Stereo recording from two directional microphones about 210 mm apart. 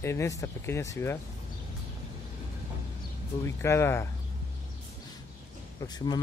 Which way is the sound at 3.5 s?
10° left (ahead or behind).